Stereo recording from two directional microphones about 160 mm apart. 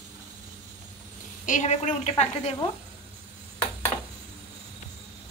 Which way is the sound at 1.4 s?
50° left (ahead or behind).